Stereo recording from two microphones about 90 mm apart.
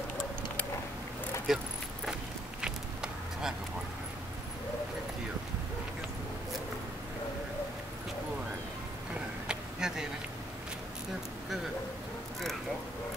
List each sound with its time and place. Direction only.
1.5 s speech: 5° right (ahead or behind)
2.6 s a sound: 5° right (ahead or behind)
9.5 s vehicle: 5° right (ahead or behind)